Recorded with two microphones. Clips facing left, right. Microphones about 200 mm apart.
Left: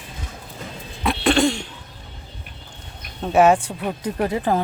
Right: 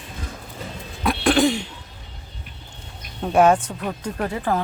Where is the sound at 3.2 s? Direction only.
5° left (ahead or behind).